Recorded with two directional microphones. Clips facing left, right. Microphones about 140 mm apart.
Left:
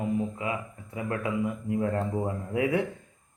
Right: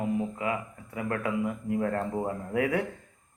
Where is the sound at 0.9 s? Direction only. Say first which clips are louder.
Even; 20° left (ahead or behind).